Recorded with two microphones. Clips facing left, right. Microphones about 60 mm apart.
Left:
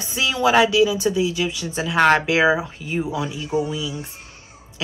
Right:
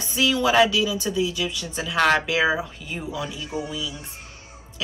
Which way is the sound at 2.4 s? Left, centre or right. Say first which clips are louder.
Left 4 dB; centre.